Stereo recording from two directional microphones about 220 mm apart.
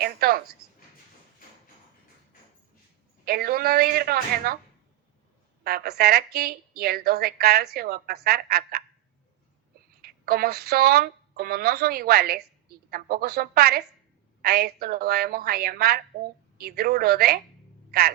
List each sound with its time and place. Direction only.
0.0 s a woman's voice: 45° right (ahead or behind)
3.2 s a woman's voice: 45° right (ahead or behind)
5.6 s a woman's voice: 45° right (ahead or behind)
10.0 s a woman's voice: 45° right (ahead or behind)